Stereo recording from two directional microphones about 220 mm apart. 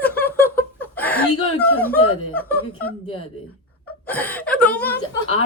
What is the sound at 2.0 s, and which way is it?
Speech, 75° left (ahead or behind).